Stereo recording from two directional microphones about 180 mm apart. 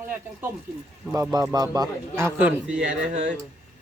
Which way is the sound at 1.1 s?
20° right (ahead or behind).